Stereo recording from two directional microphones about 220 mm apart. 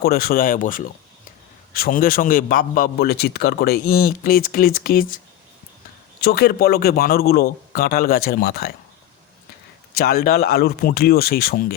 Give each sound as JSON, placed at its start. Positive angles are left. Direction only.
{"t": 0.0, "sound": "a man's voice", "side_deg": 45}
{"t": 9.9, "sound": "a man's voice", "side_deg": 45}